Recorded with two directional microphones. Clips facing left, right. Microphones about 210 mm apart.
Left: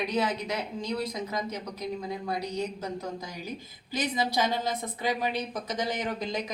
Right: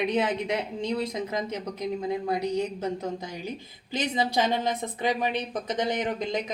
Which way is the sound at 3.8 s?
20° right (ahead or behind).